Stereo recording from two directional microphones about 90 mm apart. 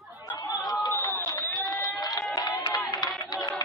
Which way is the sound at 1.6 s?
45° left (ahead or behind).